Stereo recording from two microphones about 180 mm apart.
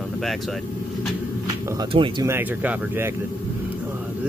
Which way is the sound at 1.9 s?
30° right (ahead or behind).